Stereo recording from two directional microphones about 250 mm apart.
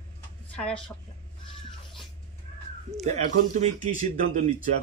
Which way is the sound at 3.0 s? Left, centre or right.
Right.